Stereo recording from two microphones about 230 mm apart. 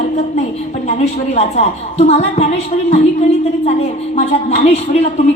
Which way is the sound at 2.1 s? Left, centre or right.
Left.